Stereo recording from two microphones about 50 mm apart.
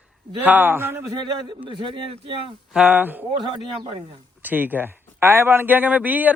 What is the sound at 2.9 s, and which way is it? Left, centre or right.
Speech, right.